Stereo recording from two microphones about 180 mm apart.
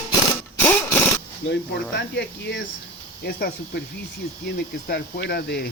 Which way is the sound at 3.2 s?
60° left (ahead or behind).